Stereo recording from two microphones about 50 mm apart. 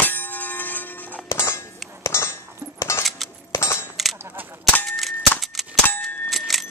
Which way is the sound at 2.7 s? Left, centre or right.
Left.